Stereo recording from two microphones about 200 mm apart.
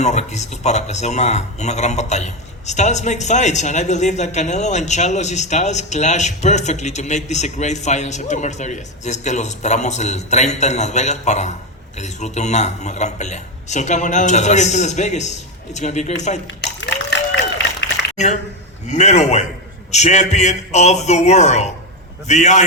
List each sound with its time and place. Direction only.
0.0 s speech: 35° left (ahead or behind)
16.6 s a sound: 60° left (ahead or behind)
17.6 s run: 60° left (ahead or behind)
18.9 s speech: 35° left (ahead or behind)